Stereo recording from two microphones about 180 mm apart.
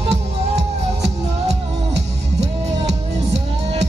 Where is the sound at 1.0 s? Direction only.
70° right (ahead or behind).